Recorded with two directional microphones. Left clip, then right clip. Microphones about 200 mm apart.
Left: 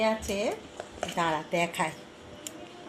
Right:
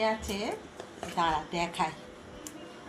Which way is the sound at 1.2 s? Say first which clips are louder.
Left 1 dB; 45° left (ahead or behind).